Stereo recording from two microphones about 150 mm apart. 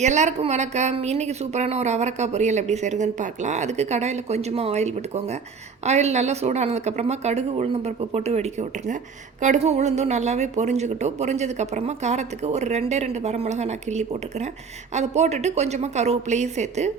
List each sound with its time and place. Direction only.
0.0 s speech: 50° right (ahead or behind)